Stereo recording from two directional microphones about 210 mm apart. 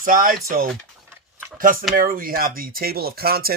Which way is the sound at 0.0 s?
40° right (ahead or behind).